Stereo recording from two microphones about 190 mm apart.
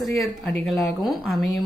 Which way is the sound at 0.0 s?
Centre (ahead or behind).